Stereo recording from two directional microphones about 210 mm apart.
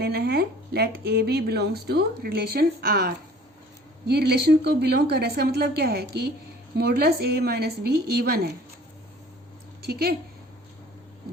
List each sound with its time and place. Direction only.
0.0 s speech: 50° right (ahead or behind)
9.8 s speech: 50° right (ahead or behind)